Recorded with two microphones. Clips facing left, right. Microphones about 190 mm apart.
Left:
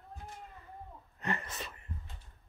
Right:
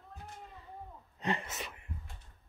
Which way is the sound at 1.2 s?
15° right (ahead or behind).